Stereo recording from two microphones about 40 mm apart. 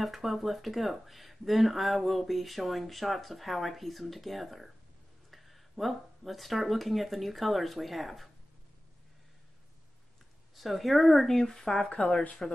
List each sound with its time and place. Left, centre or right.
0.0 s speech: centre
10.5 s speech: centre
11.9 s speech: left